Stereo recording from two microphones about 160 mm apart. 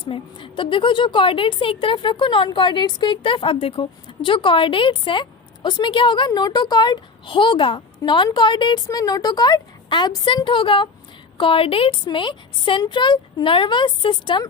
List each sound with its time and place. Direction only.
0.0 s a woman's voice: 30° left (ahead or behind)